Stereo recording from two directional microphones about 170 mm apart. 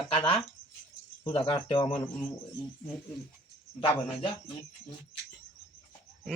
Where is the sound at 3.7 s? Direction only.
30° left (ahead or behind).